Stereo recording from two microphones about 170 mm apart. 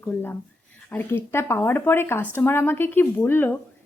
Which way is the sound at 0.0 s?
10° left (ahead or behind).